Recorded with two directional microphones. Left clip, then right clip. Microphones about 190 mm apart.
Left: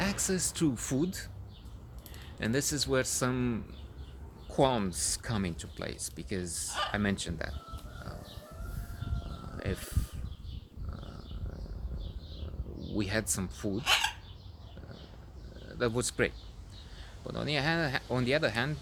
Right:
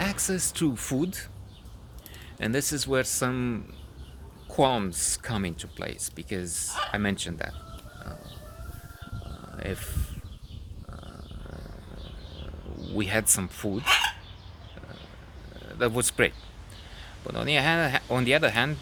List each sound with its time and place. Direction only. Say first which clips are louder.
0.0 s speech: right 3 dB; 20° right (ahead or behind)
9.6 s speech: right 3 dB; 10° right (ahead or behind)
13.0 s speech: right 6 dB; 15° right (ahead or behind)
15.8 s speech: right 6 dB; 15° right (ahead or behind)